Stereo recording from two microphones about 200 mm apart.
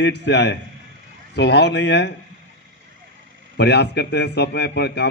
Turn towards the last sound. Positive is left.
turn(degrees=55)  # may be behind; listen again after turning